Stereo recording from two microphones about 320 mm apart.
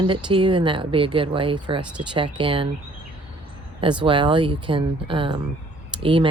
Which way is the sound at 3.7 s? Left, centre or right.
Centre.